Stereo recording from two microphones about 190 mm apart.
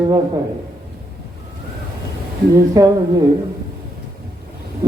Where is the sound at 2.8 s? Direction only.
20° right (ahead or behind).